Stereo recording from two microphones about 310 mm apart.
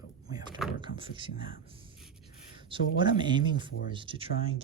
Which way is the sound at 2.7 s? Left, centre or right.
Centre.